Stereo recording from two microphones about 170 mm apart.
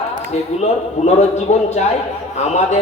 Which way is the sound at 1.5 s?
40° left (ahead or behind).